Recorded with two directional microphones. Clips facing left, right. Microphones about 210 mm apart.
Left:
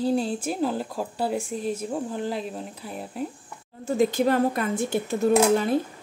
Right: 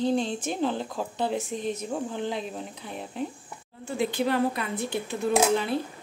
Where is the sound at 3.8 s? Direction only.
40° left (ahead or behind).